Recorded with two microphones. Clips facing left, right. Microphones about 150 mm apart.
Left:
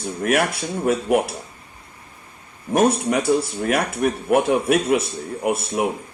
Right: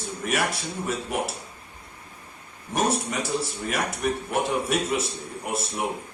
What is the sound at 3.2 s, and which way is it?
Speech, 50° left (ahead or behind).